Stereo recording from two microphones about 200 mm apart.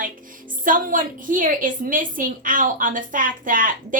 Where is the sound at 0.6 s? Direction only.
45° right (ahead or behind).